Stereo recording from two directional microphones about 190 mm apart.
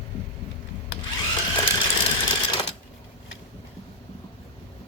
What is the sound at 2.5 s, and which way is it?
Sewing machine, 25° left (ahead or behind).